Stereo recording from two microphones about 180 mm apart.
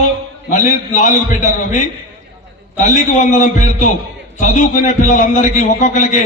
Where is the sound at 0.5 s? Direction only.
45° left (ahead or behind).